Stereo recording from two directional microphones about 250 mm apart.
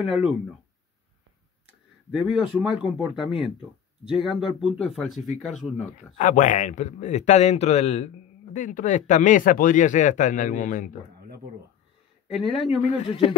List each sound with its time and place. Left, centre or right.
0.0 s speech: centre
2.0 s speech: centre
6.1 s speech: left
11.1 s a sound: right
12.3 s speech: centre
12.5 s speech: left